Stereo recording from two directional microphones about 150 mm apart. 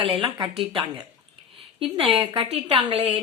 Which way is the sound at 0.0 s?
35° right (ahead or behind).